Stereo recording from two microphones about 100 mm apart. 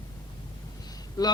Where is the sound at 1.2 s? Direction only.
40° left (ahead or behind).